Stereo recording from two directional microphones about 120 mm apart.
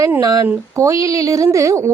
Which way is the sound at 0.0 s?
30° right (ahead or behind).